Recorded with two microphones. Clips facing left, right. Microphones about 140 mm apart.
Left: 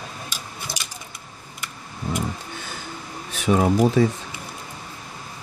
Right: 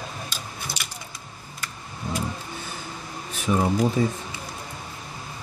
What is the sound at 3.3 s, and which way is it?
Speech, 90° left.